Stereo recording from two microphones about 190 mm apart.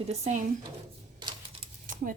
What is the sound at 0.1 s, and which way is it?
Speech, 40° right (ahead or behind).